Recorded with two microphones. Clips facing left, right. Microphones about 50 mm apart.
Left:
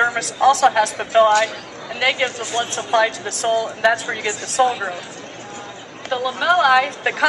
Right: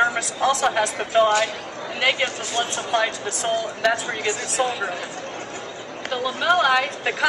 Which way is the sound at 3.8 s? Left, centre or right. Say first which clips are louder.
Left 2 dB; centre.